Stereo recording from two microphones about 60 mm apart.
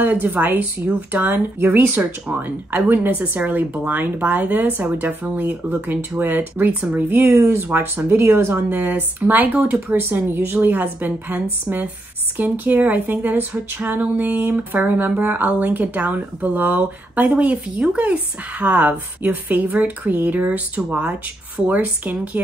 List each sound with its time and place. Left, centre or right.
0.0 s a woman's voice: right
2.0 s speech: right
2.7 s a woman's voice: right
7.3 s a woman's voice: right